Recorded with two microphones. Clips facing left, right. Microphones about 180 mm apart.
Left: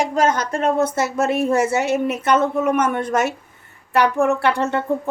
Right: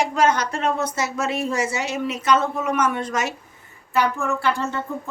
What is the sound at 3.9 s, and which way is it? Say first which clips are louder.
Speech: left 5 dB; 70° left (ahead or behind).